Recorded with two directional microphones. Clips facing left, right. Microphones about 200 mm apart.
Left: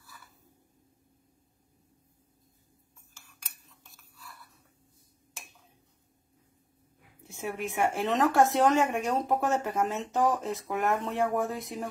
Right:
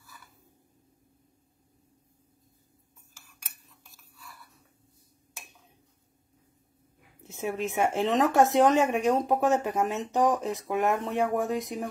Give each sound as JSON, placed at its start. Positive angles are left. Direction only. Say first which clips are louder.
{"t": 3.9, "sound": "chewing", "louder": "even", "side_deg": 0}
{"t": 7.2, "sound": "a woman's voice", "louder": "right 4 dB", "side_deg": -20}